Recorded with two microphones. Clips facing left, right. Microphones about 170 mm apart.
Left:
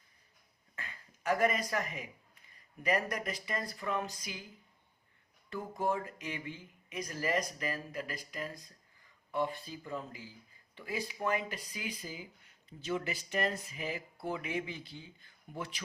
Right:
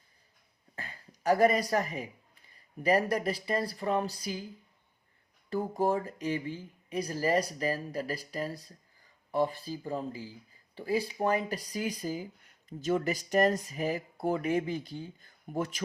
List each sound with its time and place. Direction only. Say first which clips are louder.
0.8 s speech: right 4 dB; 35° right (ahead or behind)
5.5 s speech: right 6 dB; 35° right (ahead or behind)